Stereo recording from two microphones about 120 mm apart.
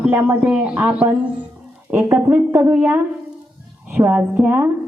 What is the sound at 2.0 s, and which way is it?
Speech, 25° right (ahead or behind).